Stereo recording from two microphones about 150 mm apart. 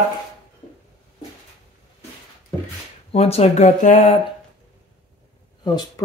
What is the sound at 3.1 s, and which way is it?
Speech, 45° left (ahead or behind).